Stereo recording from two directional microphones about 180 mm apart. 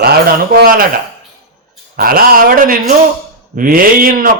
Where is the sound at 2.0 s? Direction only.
55° right (ahead or behind).